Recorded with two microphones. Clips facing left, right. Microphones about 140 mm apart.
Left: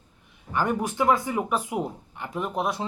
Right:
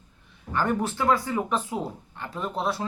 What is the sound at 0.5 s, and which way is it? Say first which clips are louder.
Speech: even; 15° left (ahead or behind).